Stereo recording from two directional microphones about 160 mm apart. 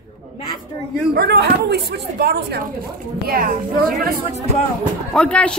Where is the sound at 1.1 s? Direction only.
85° right.